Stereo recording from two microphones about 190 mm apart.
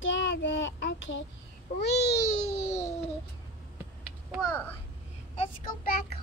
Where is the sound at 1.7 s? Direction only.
65° left (ahead or behind).